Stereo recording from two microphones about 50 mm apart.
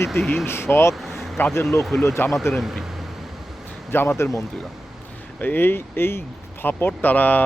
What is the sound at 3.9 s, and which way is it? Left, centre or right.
Speech, left.